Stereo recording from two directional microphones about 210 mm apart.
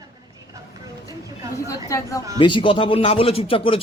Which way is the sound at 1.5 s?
15° left (ahead or behind).